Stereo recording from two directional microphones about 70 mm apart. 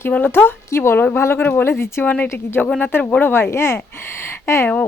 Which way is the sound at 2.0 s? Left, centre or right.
Left.